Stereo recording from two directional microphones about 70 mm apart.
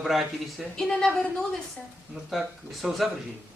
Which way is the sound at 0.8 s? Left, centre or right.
Centre.